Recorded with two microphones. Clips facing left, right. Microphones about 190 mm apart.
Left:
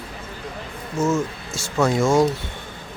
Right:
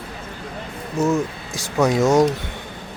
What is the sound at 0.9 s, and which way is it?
Speech, 15° right (ahead or behind).